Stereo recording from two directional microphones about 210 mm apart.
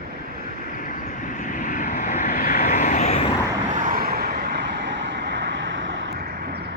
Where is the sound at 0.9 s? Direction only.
40° left (ahead or behind).